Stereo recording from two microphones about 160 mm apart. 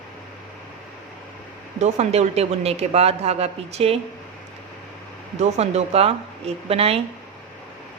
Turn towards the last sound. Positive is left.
turn(degrees=-40)  # may be behind; listen again after turning